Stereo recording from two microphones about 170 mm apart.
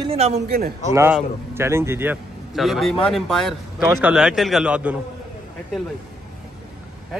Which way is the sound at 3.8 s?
10° right (ahead or behind).